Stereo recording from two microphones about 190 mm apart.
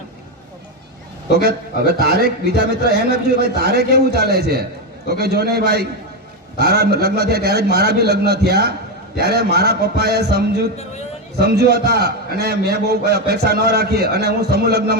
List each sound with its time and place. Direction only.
1.4 s a man's voice: 55° right (ahead or behind)